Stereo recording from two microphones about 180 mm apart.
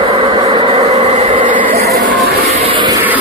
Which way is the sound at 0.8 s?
40° right (ahead or behind).